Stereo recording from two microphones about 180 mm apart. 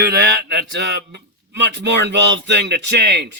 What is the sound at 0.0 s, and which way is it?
Mantra, 65° right (ahead or behind).